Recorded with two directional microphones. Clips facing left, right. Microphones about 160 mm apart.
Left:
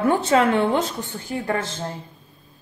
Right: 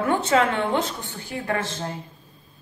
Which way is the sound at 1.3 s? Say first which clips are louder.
Left 4 dB; 35° left (ahead or behind).